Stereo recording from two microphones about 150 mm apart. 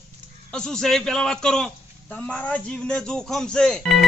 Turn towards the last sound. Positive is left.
turn(degrees=5)  # may be behind; listen again after turning